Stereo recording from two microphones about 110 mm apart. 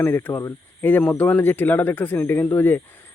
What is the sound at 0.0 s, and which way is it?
Speech, 20° left (ahead or behind).